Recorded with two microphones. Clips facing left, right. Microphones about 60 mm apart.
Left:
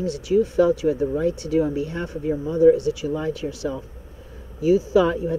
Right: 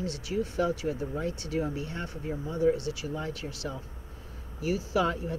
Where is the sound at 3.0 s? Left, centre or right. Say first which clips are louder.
Left 10 dB; left.